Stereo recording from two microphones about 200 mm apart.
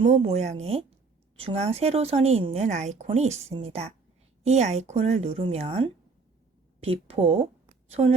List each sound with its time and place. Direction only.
0.0 s a woman's voice: 35° right (ahead or behind)